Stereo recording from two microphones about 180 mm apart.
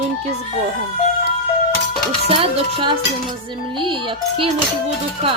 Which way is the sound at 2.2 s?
35° right (ahead or behind).